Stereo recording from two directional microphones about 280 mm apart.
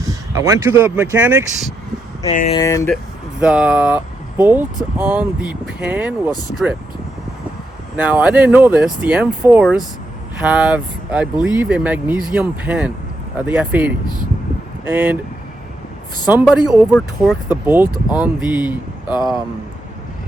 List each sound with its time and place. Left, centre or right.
0.0 s speech: centre
2.2 s speech: left
2.6 s speech: centre
3.4 s speech: centre
7.9 s speech: centre
16.3 s speech: centre